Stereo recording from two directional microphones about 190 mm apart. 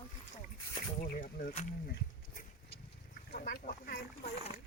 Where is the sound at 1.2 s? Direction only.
45° left (ahead or behind).